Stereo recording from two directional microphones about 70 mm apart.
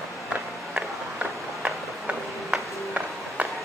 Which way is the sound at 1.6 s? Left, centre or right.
Centre.